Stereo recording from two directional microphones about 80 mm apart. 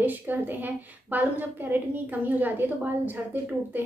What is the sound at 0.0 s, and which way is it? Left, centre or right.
A woman's voice, right.